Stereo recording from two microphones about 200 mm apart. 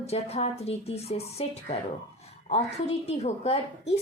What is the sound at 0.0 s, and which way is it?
A woman's voice, 30° left (ahead or behind).